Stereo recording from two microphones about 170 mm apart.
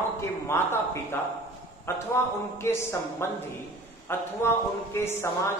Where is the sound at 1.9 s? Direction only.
15° left (ahead or behind).